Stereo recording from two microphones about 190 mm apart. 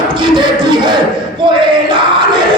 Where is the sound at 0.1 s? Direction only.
25° right (ahead or behind).